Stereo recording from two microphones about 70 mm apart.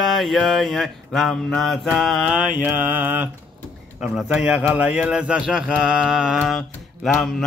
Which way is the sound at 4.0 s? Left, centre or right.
Centre.